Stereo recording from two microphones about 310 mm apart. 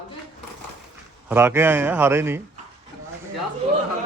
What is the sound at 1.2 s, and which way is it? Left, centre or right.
Speech, centre.